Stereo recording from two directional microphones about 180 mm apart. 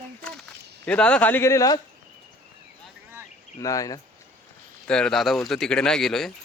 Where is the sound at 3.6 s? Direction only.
20° left (ahead or behind).